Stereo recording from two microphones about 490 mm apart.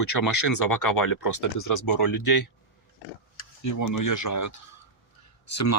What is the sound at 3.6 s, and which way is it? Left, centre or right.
Speech, left.